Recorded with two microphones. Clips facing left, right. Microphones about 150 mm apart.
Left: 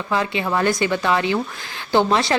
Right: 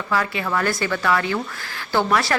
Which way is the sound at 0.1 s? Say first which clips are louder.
Left 2 dB; 20° left (ahead or behind).